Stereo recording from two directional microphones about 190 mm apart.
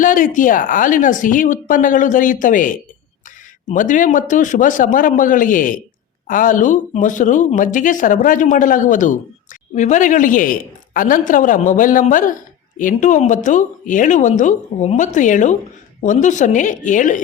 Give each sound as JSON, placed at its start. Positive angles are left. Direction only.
{"t": 0.0, "sound": "a woman's voice", "side_deg": 45}